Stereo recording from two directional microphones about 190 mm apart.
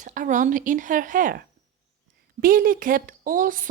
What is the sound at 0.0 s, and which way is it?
Speech, 45° right (ahead or behind).